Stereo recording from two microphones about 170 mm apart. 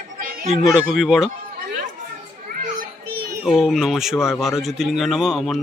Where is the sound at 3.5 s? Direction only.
Centre (ahead or behind).